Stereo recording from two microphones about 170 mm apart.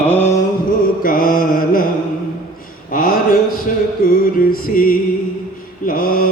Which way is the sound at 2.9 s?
55° left (ahead or behind).